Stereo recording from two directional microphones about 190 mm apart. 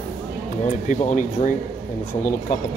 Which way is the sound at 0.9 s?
40° left (ahead or behind).